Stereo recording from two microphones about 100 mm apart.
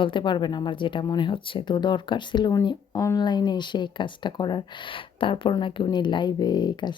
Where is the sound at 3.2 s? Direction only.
45° left (ahead or behind).